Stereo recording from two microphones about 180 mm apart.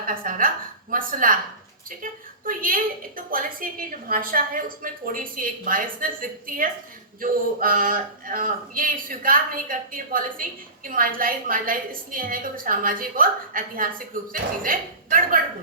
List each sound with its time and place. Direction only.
0.1 s a woman's voice: 50° right (ahead or behind)